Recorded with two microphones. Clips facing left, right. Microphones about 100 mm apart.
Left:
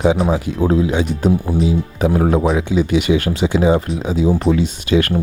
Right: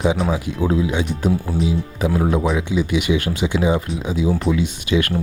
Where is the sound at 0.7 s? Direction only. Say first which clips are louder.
Left 4 dB; 45° left (ahead or behind).